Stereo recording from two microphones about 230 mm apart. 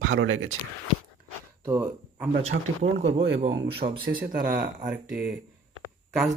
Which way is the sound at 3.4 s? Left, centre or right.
Right.